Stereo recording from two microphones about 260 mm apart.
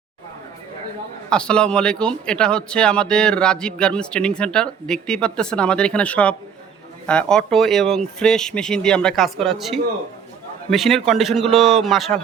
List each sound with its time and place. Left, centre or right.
1.3 s speech: centre